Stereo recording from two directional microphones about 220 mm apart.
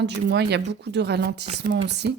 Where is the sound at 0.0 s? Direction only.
50° right (ahead or behind).